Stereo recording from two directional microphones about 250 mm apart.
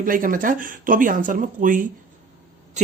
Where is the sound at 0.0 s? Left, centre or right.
Right.